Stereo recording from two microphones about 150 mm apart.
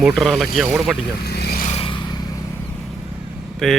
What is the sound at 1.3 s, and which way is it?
Vehicle, 90° left.